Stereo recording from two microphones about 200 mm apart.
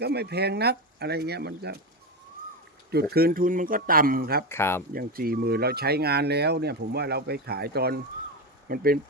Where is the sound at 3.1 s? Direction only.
50° right (ahead or behind).